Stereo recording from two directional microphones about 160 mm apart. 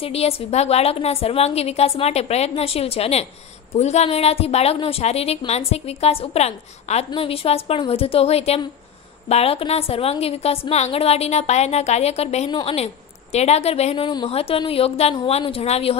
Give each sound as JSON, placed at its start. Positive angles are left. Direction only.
{"t": 0.0, "sound": "a woman's voice", "side_deg": 35}